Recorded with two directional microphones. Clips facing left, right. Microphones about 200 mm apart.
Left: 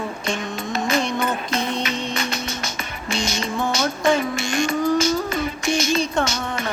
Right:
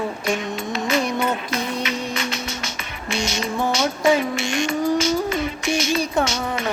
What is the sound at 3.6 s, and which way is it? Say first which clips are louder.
Music: right 2 dB; 5° right (ahead or behind).